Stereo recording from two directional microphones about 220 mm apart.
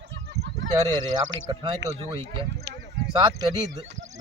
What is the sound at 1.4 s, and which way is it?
Speech, 20° right (ahead or behind).